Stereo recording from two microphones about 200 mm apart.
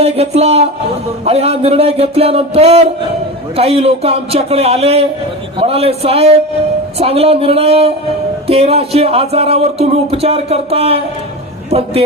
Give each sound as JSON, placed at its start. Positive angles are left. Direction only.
{"t": 0.0, "sound": "speech", "side_deg": -30}